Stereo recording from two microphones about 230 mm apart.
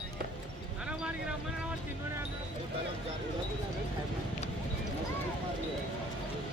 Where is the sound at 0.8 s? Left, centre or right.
Centre.